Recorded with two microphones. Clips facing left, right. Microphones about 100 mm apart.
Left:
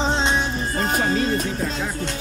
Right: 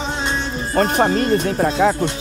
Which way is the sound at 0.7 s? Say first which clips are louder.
Right 7 dB; 60° right (ahead or behind).